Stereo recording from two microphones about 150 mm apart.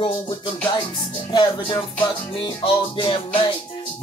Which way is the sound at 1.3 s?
30° left (ahead or behind).